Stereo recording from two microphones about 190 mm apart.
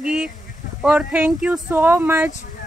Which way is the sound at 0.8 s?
5° right (ahead or behind).